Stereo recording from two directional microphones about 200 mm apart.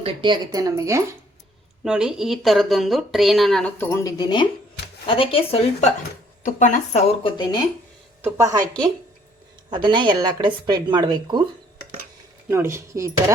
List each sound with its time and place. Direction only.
0.0 s a woman's voice: 25° right (ahead or behind)
1.8 s speech: 5° right (ahead or behind); by 5.9 s 30° left (ahead or behind)
6.4 s speech: 40° left (ahead or behind); by 7.6 s 20° left (ahead or behind)
8.2 s a woman's voice: 15° right (ahead or behind)
9.6 s speech: 20° right (ahead or behind)
12.5 s a woman's voice: 15° right (ahead or behind)